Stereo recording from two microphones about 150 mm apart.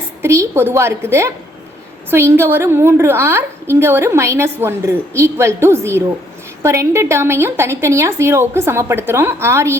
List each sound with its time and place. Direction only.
0.2 s a woman's voice: 20° right (ahead or behind)